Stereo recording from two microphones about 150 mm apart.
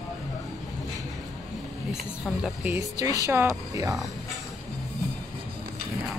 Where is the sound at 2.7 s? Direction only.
20° right (ahead or behind).